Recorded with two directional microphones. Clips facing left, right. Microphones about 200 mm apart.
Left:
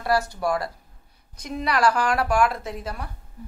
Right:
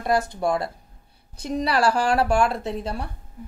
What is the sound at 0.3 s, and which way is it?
A woman's voice, 25° right (ahead or behind).